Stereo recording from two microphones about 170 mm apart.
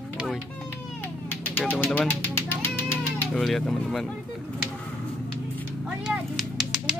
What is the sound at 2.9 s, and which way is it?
Speech, 5° left (ahead or behind).